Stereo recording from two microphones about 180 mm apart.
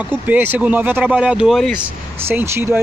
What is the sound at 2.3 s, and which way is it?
Speech, 15° right (ahead or behind).